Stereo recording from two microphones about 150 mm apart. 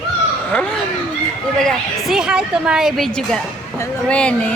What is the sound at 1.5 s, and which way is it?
A woman's voice, centre (ahead or behind).